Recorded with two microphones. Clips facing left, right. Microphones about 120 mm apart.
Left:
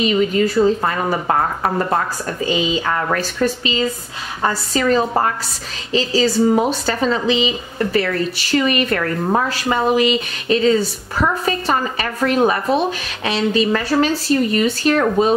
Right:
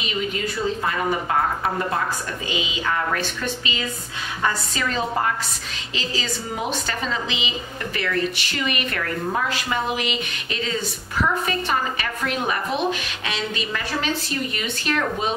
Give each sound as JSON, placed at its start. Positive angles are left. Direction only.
{"t": 0.1, "sound": "a woman's voice", "side_deg": 40}